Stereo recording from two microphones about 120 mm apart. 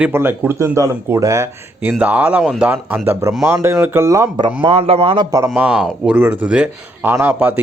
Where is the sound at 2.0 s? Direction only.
10° right (ahead or behind).